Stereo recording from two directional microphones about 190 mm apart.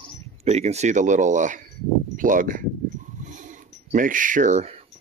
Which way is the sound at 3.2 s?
40° right (ahead or behind).